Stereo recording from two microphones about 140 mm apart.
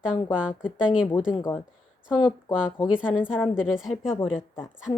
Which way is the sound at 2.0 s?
5° right (ahead or behind).